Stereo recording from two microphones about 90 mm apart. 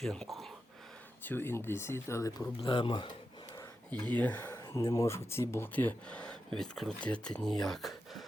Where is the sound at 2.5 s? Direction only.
65° left (ahead or behind).